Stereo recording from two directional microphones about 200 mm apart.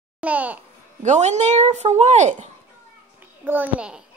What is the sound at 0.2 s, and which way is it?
Speech, 5° right (ahead or behind).